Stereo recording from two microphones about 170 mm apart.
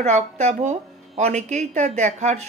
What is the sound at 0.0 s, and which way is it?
Speech, 45° right (ahead or behind).